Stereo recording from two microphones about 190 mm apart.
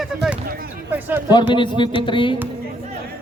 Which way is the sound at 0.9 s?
10° right (ahead or behind).